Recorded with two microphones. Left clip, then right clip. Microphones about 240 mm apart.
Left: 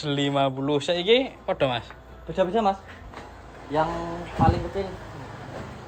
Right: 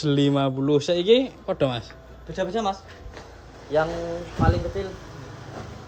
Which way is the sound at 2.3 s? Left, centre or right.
Centre.